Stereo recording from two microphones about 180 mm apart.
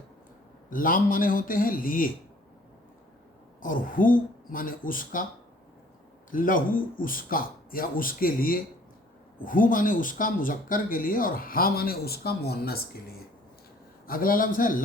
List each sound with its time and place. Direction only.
0.7 s speech: 50° left (ahead or behind)
3.6 s speech: 50° left (ahead or behind)
6.3 s speech: 50° left (ahead or behind)